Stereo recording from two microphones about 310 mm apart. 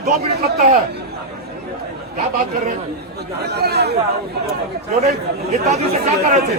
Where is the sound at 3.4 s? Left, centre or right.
Right.